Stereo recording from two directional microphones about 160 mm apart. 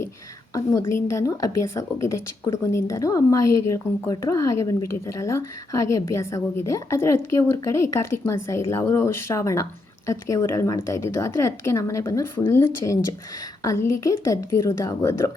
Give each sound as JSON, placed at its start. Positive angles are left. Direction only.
{"t": 0.5, "sound": "a woman's voice", "side_deg": 20}